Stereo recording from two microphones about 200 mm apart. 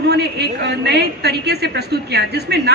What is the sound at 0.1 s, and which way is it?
A man's voice, 55° right (ahead or behind).